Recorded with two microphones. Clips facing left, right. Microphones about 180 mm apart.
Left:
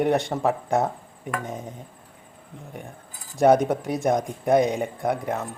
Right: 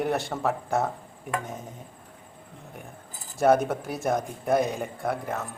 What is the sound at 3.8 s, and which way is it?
Speech, 5° right (ahead or behind).